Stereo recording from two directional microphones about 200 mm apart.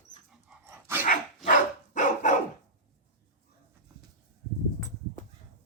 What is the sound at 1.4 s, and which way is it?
Dog, 40° left (ahead or behind).